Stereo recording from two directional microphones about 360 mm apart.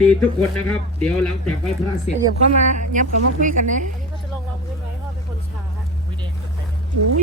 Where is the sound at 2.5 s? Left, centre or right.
Right.